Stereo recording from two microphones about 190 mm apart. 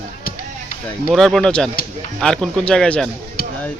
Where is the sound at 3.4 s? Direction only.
50° left (ahead or behind).